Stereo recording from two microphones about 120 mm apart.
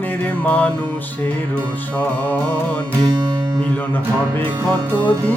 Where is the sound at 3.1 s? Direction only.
35° right (ahead or behind).